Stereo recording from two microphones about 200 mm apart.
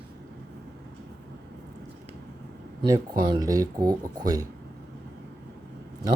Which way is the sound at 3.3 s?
20° right (ahead or behind).